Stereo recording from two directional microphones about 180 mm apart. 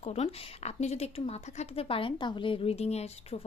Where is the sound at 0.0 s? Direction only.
35° left (ahead or behind).